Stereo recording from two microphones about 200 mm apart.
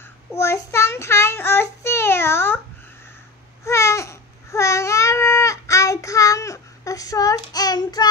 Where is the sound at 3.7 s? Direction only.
15° left (ahead or behind).